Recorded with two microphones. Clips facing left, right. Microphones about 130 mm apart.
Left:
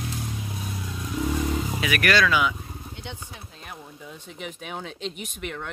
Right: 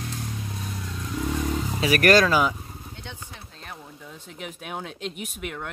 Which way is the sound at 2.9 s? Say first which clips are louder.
Left 2 dB; 15° left (ahead or behind).